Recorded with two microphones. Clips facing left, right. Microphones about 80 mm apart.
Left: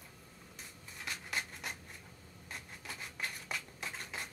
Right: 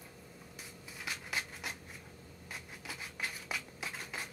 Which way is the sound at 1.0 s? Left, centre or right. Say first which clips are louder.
Even; centre.